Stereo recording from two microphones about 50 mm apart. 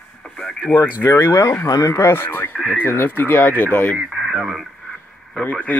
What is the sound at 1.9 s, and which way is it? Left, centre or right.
Speech, left.